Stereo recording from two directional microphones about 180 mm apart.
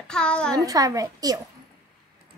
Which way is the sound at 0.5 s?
20° right (ahead or behind).